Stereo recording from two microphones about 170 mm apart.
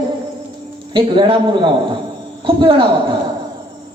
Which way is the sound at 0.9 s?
30° right (ahead or behind).